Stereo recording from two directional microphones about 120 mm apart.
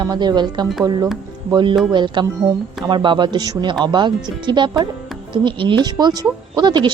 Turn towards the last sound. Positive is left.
turn(degrees=-40)  # may be behind; listen again after turning